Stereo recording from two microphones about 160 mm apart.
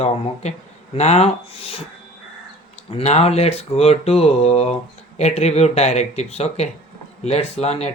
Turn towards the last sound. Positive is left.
turn(degrees=40)  # may be behind; listen again after turning